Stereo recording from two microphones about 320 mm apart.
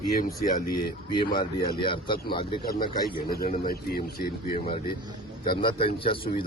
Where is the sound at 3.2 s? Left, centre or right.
Left.